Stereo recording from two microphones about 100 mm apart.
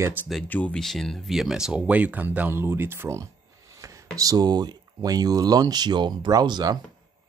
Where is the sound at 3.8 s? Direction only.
35° right (ahead or behind).